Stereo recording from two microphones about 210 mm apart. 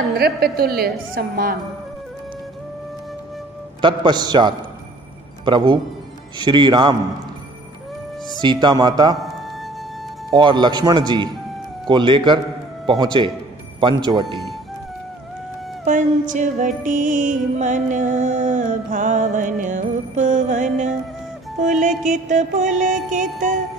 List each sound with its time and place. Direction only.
0.2 s a woman's voice: 45° right (ahead or behind)
3.8 s a man's voice: 20° right (ahead or behind)
8.4 s a man's voice: 20° right (ahead or behind)
10.3 s a man's voice: 20° right (ahead or behind)
15.8 s music: 35° right (ahead or behind)